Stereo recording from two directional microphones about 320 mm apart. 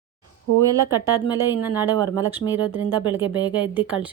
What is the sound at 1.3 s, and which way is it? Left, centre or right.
A woman's voice, centre.